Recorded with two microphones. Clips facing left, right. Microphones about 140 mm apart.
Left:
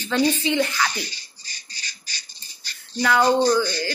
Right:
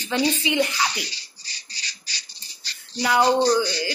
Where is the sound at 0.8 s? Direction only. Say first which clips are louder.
Even; 50° left (ahead or behind).